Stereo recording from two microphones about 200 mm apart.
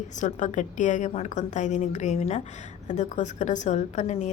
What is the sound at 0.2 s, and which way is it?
A woman's voice, 40° left (ahead or behind).